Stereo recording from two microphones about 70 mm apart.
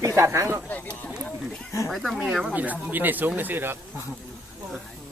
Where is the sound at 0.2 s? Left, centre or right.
Right.